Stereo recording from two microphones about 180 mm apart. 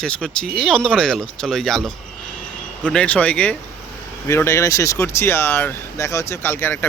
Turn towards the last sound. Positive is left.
turn(degrees=10)  # may be behind; listen again after turning